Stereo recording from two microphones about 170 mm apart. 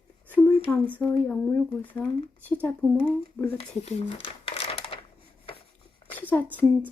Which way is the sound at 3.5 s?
35° left (ahead or behind).